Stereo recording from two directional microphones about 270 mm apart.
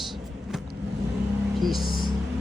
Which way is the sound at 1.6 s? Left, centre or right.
Centre.